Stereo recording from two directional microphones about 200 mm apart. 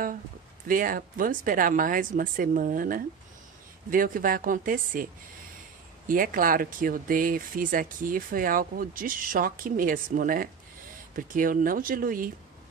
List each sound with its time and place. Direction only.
0.7 s speech: 45° right (ahead or behind)
6.0 s speech: 45° right (ahead or behind)